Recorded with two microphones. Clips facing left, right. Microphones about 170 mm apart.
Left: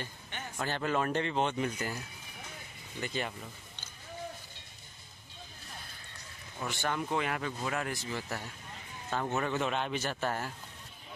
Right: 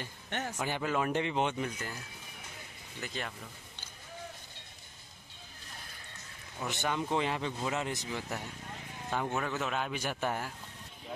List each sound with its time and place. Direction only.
0.3 s a sound: 75° right (ahead or behind)
0.6 s speech: 10° right (ahead or behind)
1.6 s speech: 5° left (ahead or behind)
3.0 s speech: centre (ahead or behind)
6.7 s speech: 20° right (ahead or behind)
9.3 s speech: centre (ahead or behind)
9.9 s speech: 10° right (ahead or behind)